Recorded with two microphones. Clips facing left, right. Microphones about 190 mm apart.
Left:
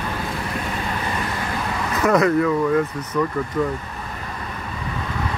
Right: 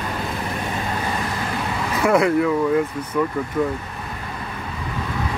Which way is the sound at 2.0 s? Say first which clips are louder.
Even; 10° right (ahead or behind).